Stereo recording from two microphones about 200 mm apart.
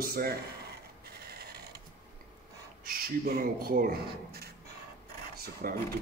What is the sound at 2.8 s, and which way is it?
A man's voice, 50° right (ahead or behind).